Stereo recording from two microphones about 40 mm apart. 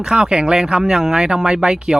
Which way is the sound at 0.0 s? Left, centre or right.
Centre.